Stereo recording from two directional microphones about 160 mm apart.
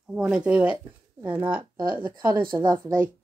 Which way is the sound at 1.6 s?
25° right (ahead or behind).